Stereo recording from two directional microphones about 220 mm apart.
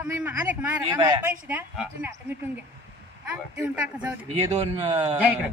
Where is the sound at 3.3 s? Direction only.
5° right (ahead or behind).